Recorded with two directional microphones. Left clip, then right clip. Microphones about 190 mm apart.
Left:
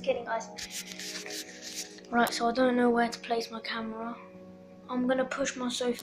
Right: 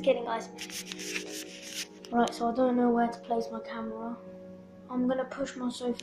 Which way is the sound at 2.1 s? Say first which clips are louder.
Left 1 dB; centre (ahead or behind).